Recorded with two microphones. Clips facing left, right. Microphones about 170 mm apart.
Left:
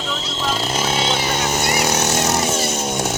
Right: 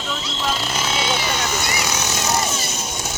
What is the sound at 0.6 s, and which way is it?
Vehicle, 40° left (ahead or behind).